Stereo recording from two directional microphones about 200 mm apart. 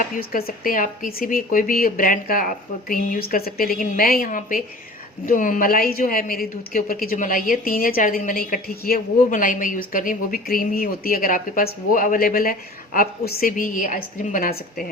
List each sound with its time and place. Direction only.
0.2 s a woman's voice: 45° left (ahead or behind)